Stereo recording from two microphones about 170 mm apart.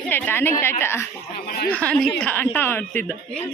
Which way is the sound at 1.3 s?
65° left (ahead or behind).